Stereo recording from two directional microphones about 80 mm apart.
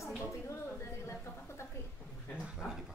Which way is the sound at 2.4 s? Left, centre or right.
Centre.